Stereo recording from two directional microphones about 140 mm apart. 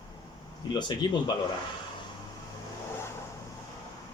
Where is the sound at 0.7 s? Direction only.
30° left (ahead or behind).